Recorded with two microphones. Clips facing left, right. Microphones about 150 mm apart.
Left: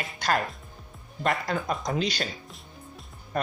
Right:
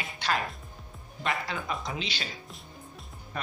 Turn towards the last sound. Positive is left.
turn(degrees=45)  # may be behind; listen again after turning